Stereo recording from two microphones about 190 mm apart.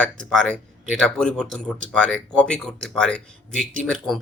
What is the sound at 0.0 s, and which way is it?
Speech, 5° left (ahead or behind).